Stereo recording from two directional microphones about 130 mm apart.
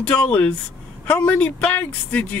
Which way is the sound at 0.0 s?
10° left (ahead or behind).